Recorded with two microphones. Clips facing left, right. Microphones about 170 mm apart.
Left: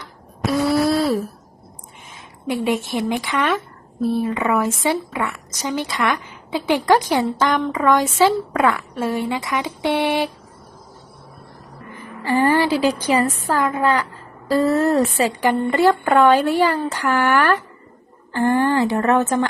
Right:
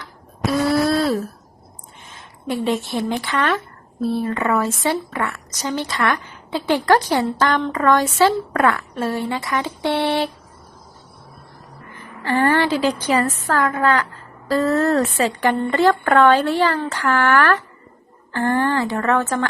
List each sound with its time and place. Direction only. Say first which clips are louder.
0.7 s a sound: left 1 dB; 10° left (ahead or behind)
2.6 s a woman's voice: even; 15° left (ahead or behind)
12.2 s a woman's voice: left 1 dB; 10° left (ahead or behind)